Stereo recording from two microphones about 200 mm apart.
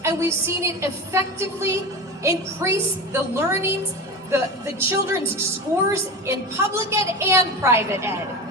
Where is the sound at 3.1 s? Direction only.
10° right (ahead or behind).